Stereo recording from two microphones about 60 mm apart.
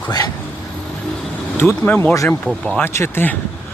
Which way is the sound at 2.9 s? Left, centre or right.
Left.